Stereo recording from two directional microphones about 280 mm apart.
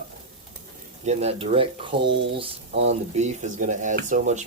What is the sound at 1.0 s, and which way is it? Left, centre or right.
Speech, right.